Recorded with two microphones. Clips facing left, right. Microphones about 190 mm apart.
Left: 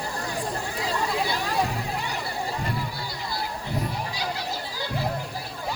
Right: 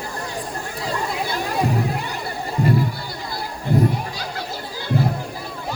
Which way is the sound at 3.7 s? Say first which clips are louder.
Right 13 dB; 50° right (ahead or behind).